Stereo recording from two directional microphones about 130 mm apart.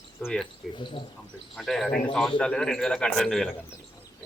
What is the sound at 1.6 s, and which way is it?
A man's voice, 5° left (ahead or behind).